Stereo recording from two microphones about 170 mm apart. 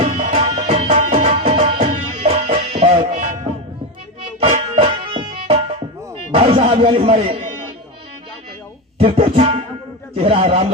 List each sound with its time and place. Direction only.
0.0 s music: 40° right (ahead or behind)
9.0 s music: 35° right (ahead or behind)
10.2 s a sound: 35° right (ahead or behind)